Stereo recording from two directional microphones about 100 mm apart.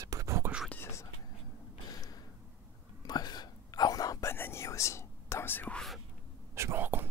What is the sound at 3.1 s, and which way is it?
Whispering, 45° left (ahead or behind).